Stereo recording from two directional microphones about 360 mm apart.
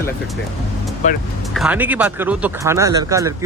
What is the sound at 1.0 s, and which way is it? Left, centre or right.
Speech, centre.